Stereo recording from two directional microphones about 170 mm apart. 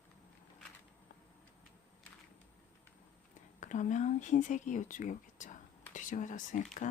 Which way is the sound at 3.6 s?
45° left (ahead or behind).